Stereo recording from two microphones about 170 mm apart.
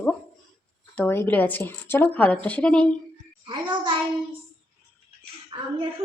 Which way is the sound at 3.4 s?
30° right (ahead or behind).